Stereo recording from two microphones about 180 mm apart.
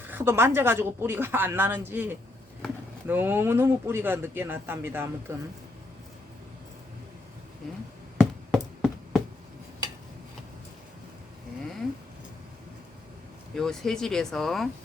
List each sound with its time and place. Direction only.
0.0 s a woman's voice: 10° right (ahead or behind)
8.2 s a sound: centre (ahead or behind)
13.6 s speech: 5° left (ahead or behind)